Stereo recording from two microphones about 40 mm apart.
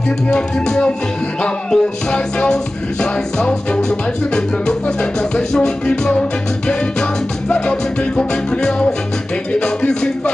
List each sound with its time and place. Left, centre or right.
0.3 s music: left